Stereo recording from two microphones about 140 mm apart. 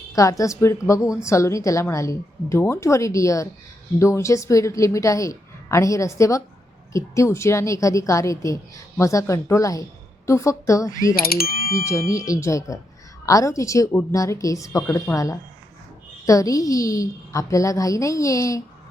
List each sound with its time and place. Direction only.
0.1 s a woman's voice: 25° left (ahead or behind)
11.2 s speech: 90° left
11.7 s a woman's voice: 20° left (ahead or behind)